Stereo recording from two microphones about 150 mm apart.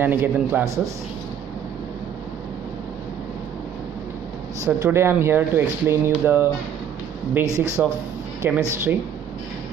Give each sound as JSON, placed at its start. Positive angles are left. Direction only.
{"t": 0.0, "sound": "speech", "side_deg": -15}
{"t": 4.6, "sound": "speech", "side_deg": -15}